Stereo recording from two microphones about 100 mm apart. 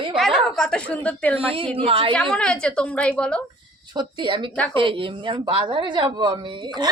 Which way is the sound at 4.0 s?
55° right (ahead or behind).